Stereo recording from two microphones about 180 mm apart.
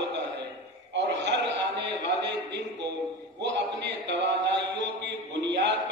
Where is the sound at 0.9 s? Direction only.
75° right (ahead or behind).